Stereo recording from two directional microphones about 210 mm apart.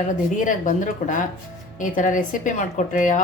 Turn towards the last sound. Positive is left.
turn(degrees=40)  # may be behind; listen again after turning